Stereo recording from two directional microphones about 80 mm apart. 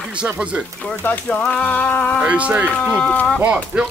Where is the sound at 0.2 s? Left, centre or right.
Centre.